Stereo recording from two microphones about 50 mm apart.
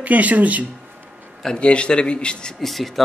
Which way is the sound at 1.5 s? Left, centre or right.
Left.